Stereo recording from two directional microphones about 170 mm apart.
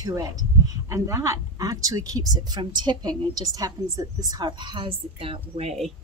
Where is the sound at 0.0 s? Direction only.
20° right (ahead or behind).